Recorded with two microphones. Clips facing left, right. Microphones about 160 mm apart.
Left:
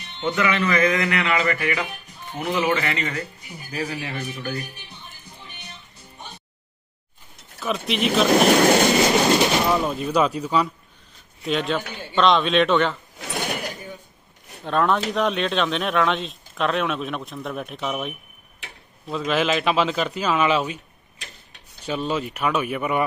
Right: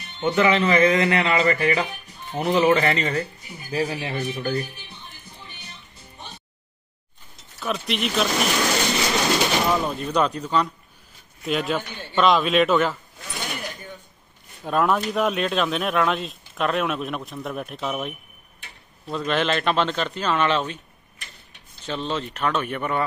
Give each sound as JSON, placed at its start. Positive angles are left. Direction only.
{"t": 0.2, "sound": "speech", "side_deg": -30}
{"t": 7.6, "sound": "speech", "side_deg": 0}
{"t": 8.3, "sound": "speech", "side_deg": 55}
{"t": 9.6, "sound": "speech", "side_deg": 5}
{"t": 11.4, "sound": "speech", "side_deg": -5}
{"t": 13.2, "sound": "mechanisms", "side_deg": 70}
{"t": 14.6, "sound": "speech", "side_deg": -5}
{"t": 21.8, "sound": "speech", "side_deg": 10}